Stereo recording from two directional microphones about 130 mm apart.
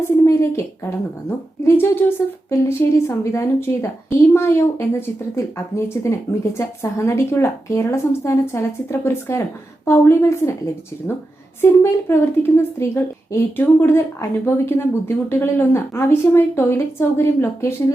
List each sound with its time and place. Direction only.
0.0 s a woman's voice: 20° left (ahead or behind)
11.6 s a woman's voice: 20° left (ahead or behind)